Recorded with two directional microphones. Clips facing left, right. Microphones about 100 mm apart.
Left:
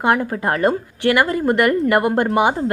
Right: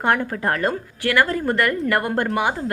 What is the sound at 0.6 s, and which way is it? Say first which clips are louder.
A woman's voice: left 5 dB; 20° left (ahead or behind).